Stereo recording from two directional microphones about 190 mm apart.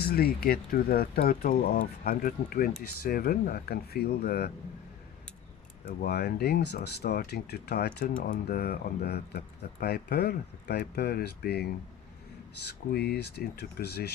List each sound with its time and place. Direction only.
0.0 s speech: 55° left (ahead or behind)
5.8 s speech: 55° left (ahead or behind)